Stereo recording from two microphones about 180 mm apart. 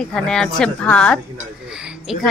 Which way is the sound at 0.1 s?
5° left (ahead or behind).